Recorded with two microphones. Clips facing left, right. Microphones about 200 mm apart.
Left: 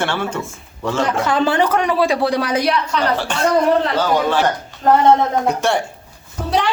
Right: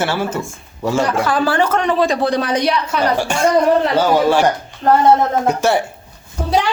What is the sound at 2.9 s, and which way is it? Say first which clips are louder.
A woman's voice: right 2 dB; 10° right (ahead or behind).